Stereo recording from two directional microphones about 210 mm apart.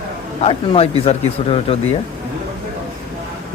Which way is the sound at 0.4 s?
25° left (ahead or behind).